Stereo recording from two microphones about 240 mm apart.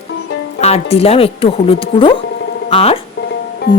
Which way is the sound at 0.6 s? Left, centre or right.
Left.